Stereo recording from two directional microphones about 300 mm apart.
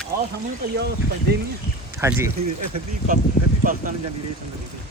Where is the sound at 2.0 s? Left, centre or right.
Centre.